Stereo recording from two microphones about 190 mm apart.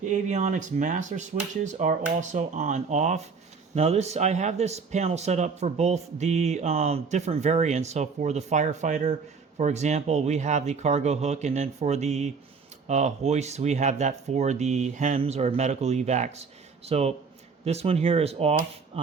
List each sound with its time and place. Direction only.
0.0 s speech: 40° right (ahead or behind)